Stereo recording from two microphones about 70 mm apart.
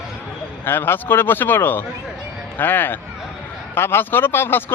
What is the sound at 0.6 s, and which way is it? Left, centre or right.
Speech, left.